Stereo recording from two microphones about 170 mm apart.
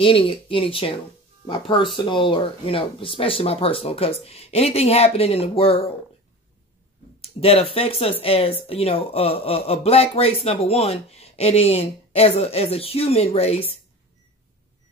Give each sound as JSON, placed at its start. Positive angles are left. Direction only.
{"t": 0.0, "sound": "speech", "side_deg": 30}
{"t": 7.2, "sound": "speech", "side_deg": 35}